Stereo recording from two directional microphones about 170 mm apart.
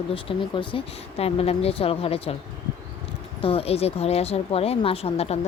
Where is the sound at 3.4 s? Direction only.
35° left (ahead or behind).